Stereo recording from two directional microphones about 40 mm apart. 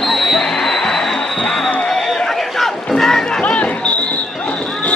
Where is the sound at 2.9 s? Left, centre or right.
Centre.